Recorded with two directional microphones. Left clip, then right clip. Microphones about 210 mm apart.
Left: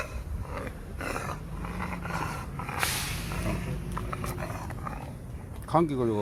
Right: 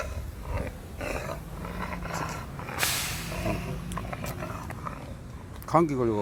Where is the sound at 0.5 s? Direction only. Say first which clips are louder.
Right 1 dB; 10° left (ahead or behind).